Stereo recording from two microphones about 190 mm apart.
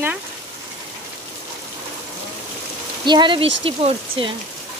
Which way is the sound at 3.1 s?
25° right (ahead or behind).